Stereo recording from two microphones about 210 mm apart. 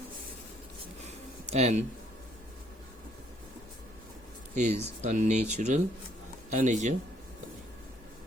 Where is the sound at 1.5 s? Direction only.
30° right (ahead or behind).